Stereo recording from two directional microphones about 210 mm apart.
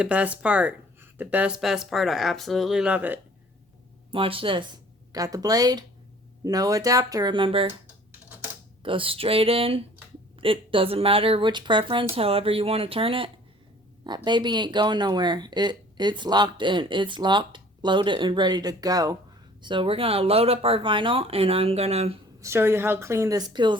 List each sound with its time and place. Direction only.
0.0 s a woman's voice: 5° right (ahead or behind)
4.1 s a woman's voice: 25° right (ahead or behind)
8.8 s a woman's voice: 25° right (ahead or behind)
22.4 s a woman's voice: 10° right (ahead or behind)